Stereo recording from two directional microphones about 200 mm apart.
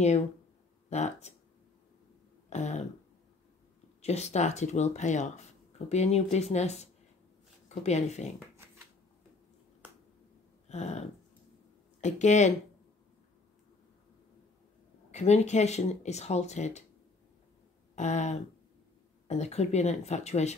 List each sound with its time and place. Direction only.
0.8 s speech: 35° left (ahead or behind)
2.5 s speech: 35° left (ahead or behind)
4.0 s speech: 35° left (ahead or behind)
10.7 s a sound: 35° left (ahead or behind)
12.0 s speech: 35° left (ahead or behind)
15.0 s speech: 35° left (ahead or behind)
17.9 s speech: 35° left (ahead or behind)